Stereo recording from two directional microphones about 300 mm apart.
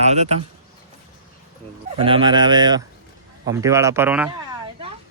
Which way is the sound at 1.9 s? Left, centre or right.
Centre.